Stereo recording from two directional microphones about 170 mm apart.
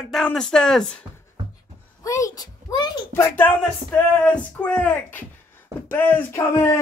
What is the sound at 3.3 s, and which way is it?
Speech, 10° left (ahead or behind).